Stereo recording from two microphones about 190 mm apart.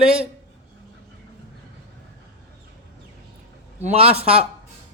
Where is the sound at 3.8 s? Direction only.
30° right (ahead or behind).